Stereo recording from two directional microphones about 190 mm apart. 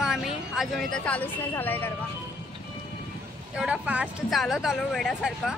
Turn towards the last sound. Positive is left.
turn(degrees=0)  # may be behind; listen again after turning